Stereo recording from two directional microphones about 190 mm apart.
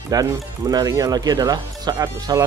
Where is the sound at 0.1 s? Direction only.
20° right (ahead or behind).